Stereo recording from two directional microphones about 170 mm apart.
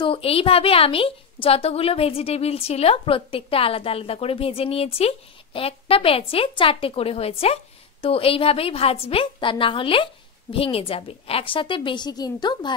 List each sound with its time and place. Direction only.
0.0 s a woman's voice: 35° left (ahead or behind)